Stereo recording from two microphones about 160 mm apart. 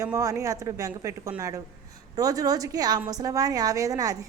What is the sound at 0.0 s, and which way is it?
Speech, 20° right (ahead or behind).